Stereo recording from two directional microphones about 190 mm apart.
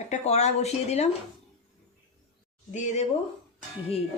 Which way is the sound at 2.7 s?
40° left (ahead or behind).